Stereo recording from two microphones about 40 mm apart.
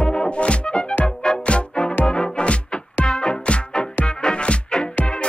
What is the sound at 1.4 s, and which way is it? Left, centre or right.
Music, left.